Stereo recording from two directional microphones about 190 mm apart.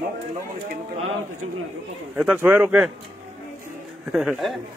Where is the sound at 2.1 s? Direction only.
5° right (ahead or behind).